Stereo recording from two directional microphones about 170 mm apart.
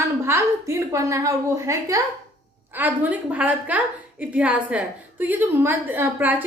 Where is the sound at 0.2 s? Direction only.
15° right (ahead or behind).